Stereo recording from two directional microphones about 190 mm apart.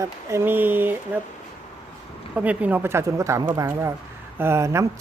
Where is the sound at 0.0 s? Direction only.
15° right (ahead or behind).